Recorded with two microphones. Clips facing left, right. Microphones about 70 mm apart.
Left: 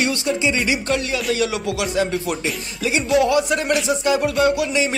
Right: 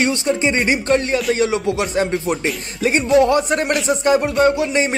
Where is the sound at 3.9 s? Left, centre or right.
Right.